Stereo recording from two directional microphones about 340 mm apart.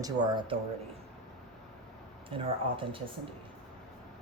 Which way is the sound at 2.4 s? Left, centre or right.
Centre.